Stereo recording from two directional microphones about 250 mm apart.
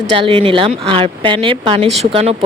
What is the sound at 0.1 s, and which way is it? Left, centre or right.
Speech, right.